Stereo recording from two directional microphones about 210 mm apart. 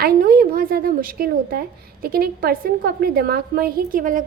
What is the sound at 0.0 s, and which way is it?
A woman's voice, 45° right (ahead or behind).